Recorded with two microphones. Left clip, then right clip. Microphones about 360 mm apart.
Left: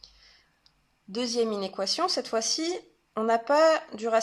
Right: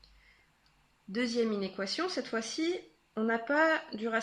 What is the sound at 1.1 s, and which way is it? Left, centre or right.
Speech, centre.